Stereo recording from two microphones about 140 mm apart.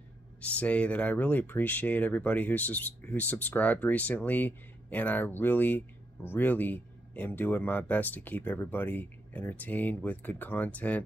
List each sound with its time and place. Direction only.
0.4 s speech: 10° left (ahead or behind)